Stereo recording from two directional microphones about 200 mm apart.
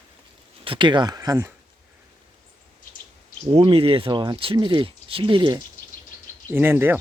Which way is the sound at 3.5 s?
25° right (ahead or behind).